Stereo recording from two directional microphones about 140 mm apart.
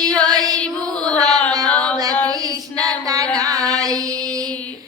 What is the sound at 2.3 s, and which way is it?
Female singing, 25° right (ahead or behind).